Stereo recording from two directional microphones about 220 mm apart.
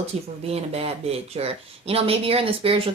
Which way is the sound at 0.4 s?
25° right (ahead or behind).